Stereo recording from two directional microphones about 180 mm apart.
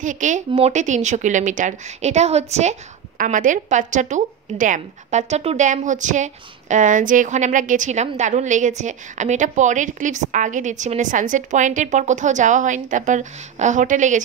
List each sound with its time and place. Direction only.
0.0 s a woman's voice: 45° right (ahead or behind)